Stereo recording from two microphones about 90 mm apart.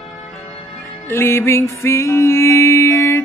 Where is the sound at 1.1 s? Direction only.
30° left (ahead or behind).